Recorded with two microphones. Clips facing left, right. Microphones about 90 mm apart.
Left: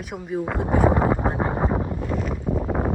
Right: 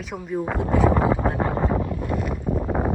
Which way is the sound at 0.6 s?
55° left (ahead or behind).